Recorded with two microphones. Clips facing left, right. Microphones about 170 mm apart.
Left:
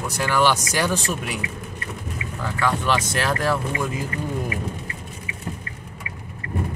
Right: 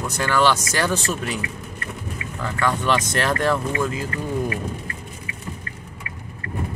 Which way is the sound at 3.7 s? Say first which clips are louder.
Right 2 dB; 15° left (ahead or behind).